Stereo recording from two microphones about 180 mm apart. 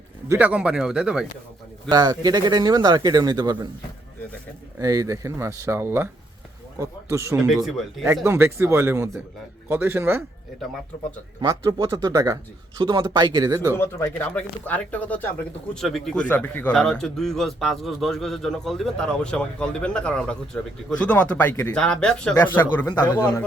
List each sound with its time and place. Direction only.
0.3 s a man's voice: 10° right (ahead or behind)
1.9 s speech: 20° right (ahead or behind)
4.8 s speech: 20° right (ahead or behind)
7.3 s a man's voice: centre (ahead or behind)
8.0 s speech: 15° right (ahead or behind)
11.3 s speech: 25° right (ahead or behind)
13.7 s a man's voice: 10° left (ahead or behind)